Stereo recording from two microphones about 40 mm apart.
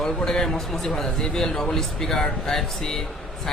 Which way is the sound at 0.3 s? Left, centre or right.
Centre.